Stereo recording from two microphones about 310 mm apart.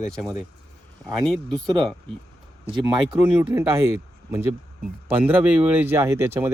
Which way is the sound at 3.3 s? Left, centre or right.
Centre.